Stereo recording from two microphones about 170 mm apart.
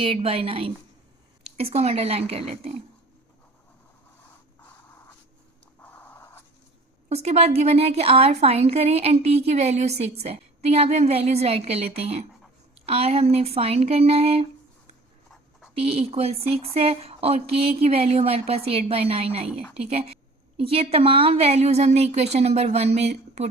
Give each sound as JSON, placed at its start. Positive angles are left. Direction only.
{"t": 0.0, "sound": "a woman's voice", "side_deg": -35}
{"t": 5.8, "sound": "writing", "side_deg": 10}
{"t": 7.1, "sound": "a woman's voice", "side_deg": -35}
{"t": 15.7, "sound": "a woman's voice", "side_deg": -35}